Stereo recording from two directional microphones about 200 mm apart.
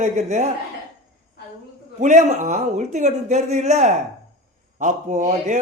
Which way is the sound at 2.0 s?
35° right (ahead or behind).